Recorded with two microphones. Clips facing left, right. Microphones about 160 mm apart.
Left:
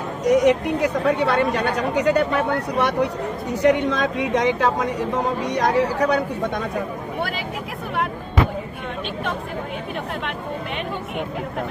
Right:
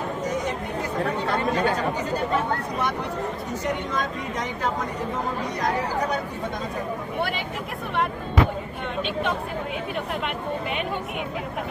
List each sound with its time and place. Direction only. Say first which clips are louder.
0.2 s speech: left 16 dB; 75° left (ahead or behind)